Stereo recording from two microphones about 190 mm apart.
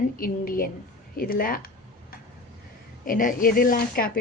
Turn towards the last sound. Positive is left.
turn(degrees=50)  # may be behind; listen again after turning